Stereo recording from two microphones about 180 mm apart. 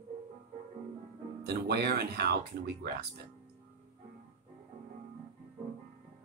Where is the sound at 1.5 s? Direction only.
65° right (ahead or behind).